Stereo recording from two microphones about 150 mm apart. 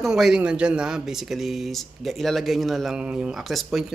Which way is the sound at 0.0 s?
5° right (ahead or behind).